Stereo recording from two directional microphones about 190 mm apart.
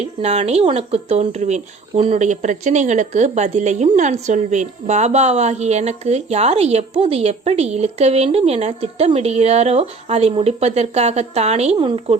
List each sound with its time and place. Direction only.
0.0 s speech: 35° right (ahead or behind)